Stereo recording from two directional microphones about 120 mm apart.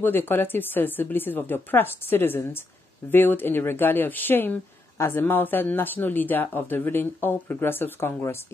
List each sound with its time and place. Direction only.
0.0 s speech: 15° left (ahead or behind)